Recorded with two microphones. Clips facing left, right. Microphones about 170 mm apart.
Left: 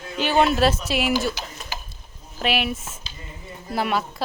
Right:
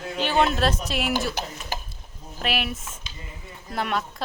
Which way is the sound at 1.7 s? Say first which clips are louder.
Right 3 dB; 55° right (ahead or behind).